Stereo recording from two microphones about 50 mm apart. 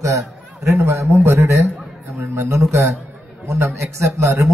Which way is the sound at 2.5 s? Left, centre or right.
Right.